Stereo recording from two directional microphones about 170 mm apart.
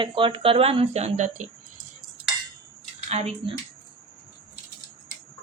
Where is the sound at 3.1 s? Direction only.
40° right (ahead or behind).